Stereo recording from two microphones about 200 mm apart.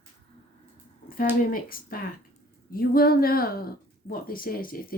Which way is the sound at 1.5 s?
45° left (ahead or behind).